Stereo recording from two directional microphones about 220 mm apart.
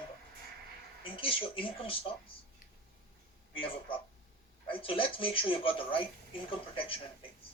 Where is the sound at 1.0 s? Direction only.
25° left (ahead or behind).